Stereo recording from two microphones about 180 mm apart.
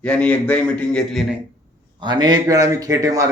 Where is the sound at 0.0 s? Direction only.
5° left (ahead or behind).